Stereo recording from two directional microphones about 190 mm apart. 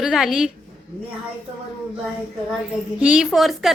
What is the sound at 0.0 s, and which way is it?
Speech, centre (ahead or behind).